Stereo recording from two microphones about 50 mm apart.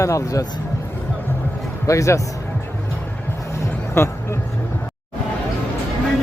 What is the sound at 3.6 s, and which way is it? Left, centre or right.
Music, left.